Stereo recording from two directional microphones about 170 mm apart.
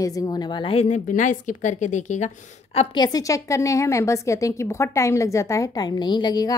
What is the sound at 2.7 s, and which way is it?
A woman's voice, 25° left (ahead or behind).